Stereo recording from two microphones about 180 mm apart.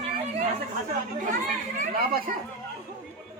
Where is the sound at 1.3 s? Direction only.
50° right (ahead or behind).